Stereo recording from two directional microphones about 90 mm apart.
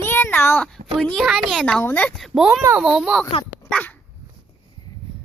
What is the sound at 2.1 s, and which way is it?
Speech, centre (ahead or behind).